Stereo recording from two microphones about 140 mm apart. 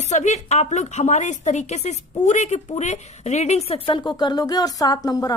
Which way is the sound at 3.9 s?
35° left (ahead or behind).